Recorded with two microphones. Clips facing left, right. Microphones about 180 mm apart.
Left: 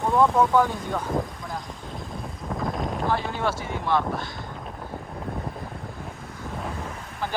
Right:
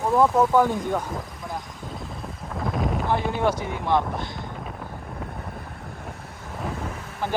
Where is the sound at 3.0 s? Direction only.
15° right (ahead or behind).